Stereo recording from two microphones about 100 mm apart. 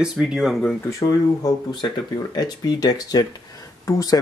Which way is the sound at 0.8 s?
35° left (ahead or behind).